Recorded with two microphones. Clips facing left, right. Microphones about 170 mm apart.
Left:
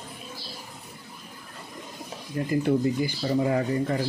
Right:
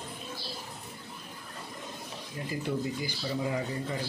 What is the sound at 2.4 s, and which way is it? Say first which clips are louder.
Speech: left 9 dB; 60° left (ahead or behind).